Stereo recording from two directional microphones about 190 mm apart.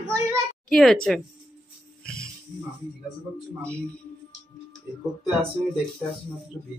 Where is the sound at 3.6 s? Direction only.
5° left (ahead or behind).